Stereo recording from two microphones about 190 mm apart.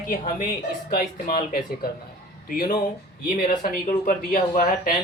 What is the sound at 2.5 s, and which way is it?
Speech, 50° left (ahead or behind).